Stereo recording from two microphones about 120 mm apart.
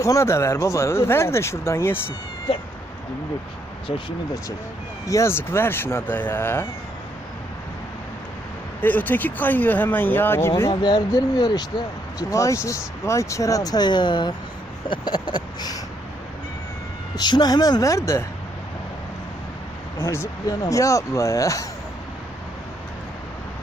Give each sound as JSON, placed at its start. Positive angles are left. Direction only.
{"t": 0.0, "sound": "speech", "side_deg": 25}
{"t": 5.0, "sound": "speech", "side_deg": 25}
{"t": 8.8, "sound": "speech", "side_deg": 15}
{"t": 10.8, "sound": "speech", "side_deg": 35}
{"t": 17.2, "sound": "speech", "side_deg": 35}
{"t": 20.0, "sound": "speech", "side_deg": 25}